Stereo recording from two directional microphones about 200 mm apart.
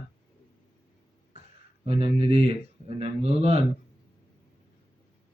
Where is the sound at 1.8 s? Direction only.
30° right (ahead or behind).